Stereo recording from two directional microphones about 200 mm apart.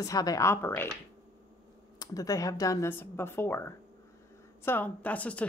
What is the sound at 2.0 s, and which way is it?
Speech, 15° left (ahead or behind).